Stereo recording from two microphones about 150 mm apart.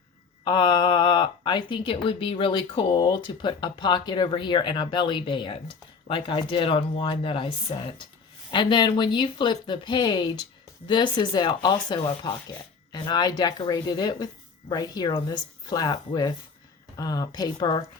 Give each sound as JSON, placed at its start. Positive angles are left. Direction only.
{"t": 0.4, "sound": "speech", "side_deg": 30}